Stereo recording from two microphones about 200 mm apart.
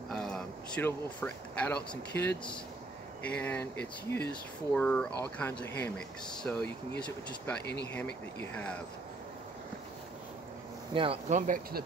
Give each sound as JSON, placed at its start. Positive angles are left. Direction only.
{"t": 0.1, "sound": "a sound", "side_deg": 5}
{"t": 1.9, "sound": "speech", "side_deg": 10}
{"t": 7.6, "sound": "speech", "side_deg": 55}
{"t": 7.9, "sound": "speech", "side_deg": 10}
{"t": 10.9, "sound": "speech", "side_deg": -25}